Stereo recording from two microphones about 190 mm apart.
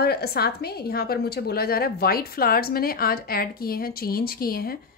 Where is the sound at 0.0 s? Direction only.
55° left (ahead or behind).